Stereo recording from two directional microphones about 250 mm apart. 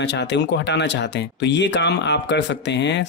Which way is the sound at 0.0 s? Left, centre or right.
Left.